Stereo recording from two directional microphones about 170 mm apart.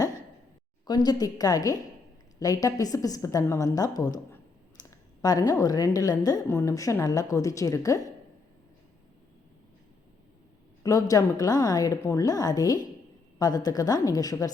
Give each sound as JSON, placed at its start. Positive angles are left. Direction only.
{"t": 0.9, "sound": "a woman's voice", "side_deg": 25}
{"t": 10.8, "sound": "a woman's voice", "side_deg": 20}